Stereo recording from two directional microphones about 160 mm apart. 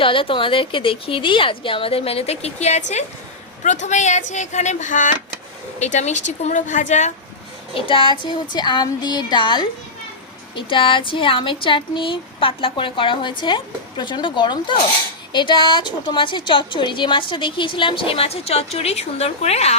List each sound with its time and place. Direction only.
0.0 s a woman's voice: 35° left (ahead or behind); by 7.1 s 50° left (ahead or behind)
7.7 s child singing: 35° left (ahead or behind)
10.5 s a woman's voice: 30° left (ahead or behind)